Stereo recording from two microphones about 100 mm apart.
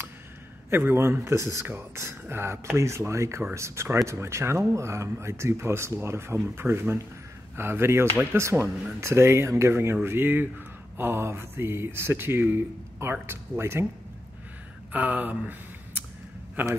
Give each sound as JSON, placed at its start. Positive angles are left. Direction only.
{"t": 0.7, "sound": "speech", "side_deg": -25}
{"t": 14.9, "sound": "speech", "side_deg": -15}
{"t": 16.6, "sound": "speech", "side_deg": -15}